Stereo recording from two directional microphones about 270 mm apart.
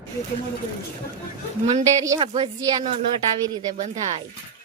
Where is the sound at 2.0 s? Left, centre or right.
Centre.